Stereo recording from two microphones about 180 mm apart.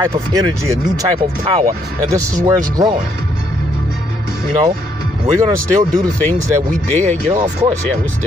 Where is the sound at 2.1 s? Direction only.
20° right (ahead or behind).